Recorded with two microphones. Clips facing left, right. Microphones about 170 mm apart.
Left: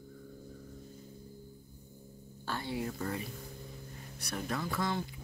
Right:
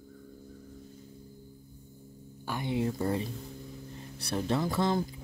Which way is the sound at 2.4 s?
15° right (ahead or behind).